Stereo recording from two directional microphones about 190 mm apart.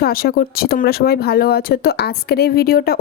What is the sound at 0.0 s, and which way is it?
Speech, 55° left (ahead or behind).